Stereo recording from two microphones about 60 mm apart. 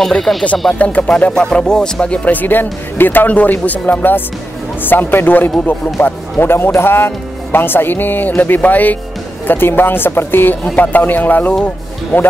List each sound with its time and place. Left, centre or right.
0.0 s speech: centre
0.7 s speech: left